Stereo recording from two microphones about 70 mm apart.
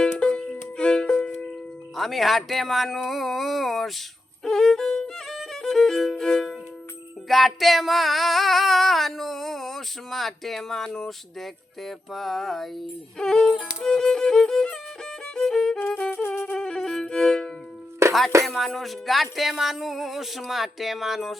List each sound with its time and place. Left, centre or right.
0.0 s music: centre
2.0 s a sound: centre
4.4 s violin: centre
7.3 s a sound: centre
13.8 s violin: centre
16.0 s music: left
16.5 s violin: centre
18.0 s music: right
18.4 s a sound: centre